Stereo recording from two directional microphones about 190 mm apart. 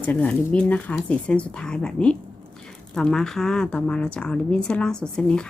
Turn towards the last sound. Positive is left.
turn(degrees=5)  # may be behind; listen again after turning